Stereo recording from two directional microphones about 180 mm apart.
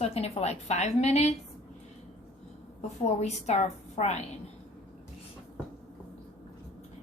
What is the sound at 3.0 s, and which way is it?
A woman's voice, 35° left (ahead or behind).